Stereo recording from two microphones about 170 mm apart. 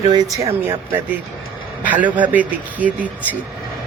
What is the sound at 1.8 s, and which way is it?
Speech, 10° right (ahead or behind).